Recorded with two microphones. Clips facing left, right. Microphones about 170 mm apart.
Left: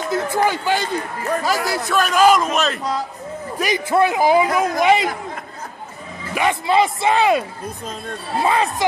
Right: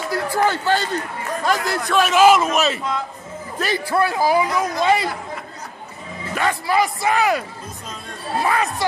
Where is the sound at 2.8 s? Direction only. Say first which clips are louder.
Left 1 dB; 35° left (ahead or behind).